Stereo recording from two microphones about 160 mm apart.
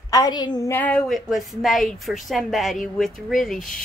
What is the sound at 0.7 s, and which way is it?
Speech, 10° left (ahead or behind).